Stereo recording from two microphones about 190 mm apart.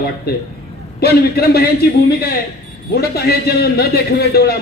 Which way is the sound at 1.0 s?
55° left (ahead or behind).